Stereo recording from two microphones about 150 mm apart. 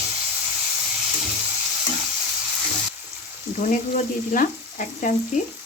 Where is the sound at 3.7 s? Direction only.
60° left (ahead or behind).